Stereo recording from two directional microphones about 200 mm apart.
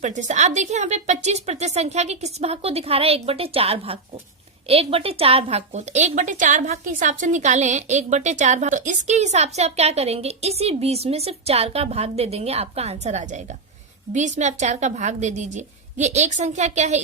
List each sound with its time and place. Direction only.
0.0 s a woman's voice: 35° right (ahead or behind)